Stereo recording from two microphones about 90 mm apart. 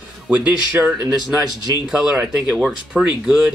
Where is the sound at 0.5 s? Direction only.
15° right (ahead or behind).